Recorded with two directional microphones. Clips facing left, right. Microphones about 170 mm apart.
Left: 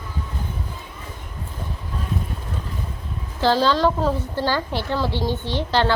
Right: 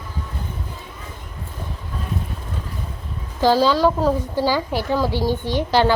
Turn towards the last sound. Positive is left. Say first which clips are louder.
# right 3 dB
turn(degrees=-10)  # may be behind; listen again after turning